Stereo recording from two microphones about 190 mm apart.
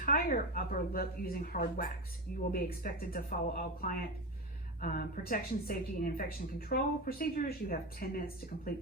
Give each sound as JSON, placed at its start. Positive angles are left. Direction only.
{"t": 0.0, "sound": "speech", "side_deg": 45}